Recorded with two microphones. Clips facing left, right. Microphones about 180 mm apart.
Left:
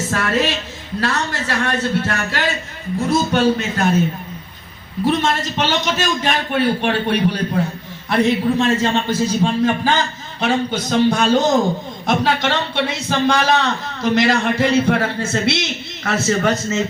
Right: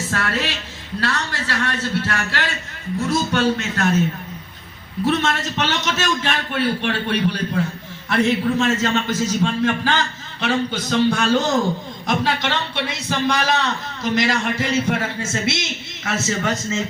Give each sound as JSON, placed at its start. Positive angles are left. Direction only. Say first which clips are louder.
{"t": 0.1, "sound": "a sound", "louder": "left 6 dB", "side_deg": 45}
{"t": 1.0, "sound": "a man's voice", "louder": "left 3 dB", "side_deg": 45}
{"t": 5.0, "sound": "a man's voice", "louder": "left 2 dB", "side_deg": 35}